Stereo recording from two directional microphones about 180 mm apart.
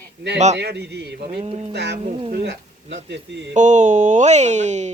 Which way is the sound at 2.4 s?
70° right (ahead or behind).